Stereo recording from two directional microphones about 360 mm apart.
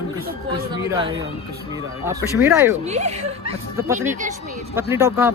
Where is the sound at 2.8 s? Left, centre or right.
Centre.